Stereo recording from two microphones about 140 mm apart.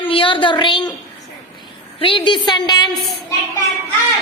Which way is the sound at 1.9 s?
40° left (ahead or behind).